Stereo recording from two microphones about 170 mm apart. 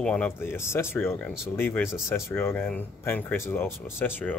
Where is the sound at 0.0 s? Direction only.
10° left (ahead or behind).